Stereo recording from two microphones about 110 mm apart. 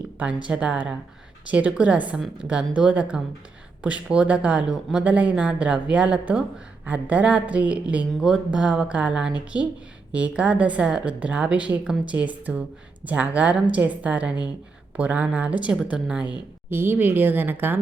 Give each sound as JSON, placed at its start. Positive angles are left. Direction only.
{"t": 0.2, "sound": "speech", "side_deg": -10}
{"t": 16.6, "sound": "speech", "side_deg": -20}